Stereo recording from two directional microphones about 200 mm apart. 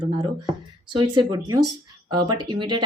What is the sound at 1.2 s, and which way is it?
Speech, 20° right (ahead or behind).